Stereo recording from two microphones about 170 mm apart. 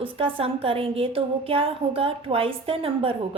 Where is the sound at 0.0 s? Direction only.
30° right (ahead or behind).